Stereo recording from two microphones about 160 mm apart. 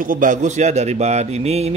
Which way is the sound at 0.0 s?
55° right (ahead or behind).